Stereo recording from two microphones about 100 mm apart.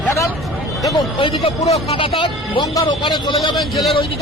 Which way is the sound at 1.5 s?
90° left.